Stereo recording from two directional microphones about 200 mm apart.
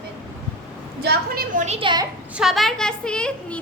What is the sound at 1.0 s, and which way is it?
Speech, 50° right (ahead or behind).